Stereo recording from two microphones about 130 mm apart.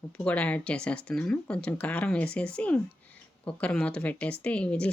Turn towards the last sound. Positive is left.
turn(degrees=10)  # may be behind; listen again after turning